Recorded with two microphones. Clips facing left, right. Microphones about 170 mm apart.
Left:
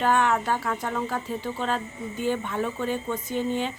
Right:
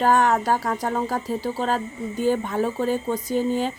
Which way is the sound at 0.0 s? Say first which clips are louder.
Right 4 dB; 40° right (ahead or behind).